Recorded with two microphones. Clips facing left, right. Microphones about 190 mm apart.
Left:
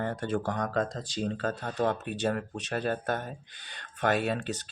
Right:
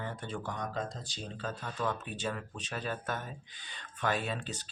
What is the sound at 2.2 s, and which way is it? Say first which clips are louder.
Speech: left 8 dB; 65° left (ahead or behind).